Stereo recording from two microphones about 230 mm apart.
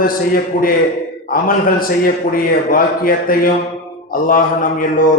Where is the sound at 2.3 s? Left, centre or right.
Left.